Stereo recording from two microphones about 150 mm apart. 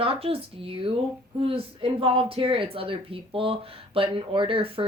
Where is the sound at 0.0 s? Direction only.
40° right (ahead or behind).